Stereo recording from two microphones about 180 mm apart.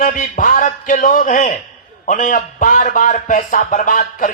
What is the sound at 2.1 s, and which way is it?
A man's voice, 50° left (ahead or behind).